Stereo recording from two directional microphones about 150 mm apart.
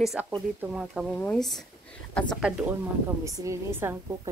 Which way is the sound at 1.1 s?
5° left (ahead or behind).